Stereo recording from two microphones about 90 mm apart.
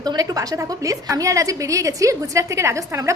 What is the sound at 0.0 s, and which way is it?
A woman's voice, 45° right (ahead or behind).